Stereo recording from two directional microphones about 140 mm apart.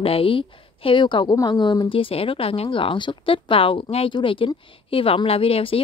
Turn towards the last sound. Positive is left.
turn(degrees=45)  # may be behind; listen again after turning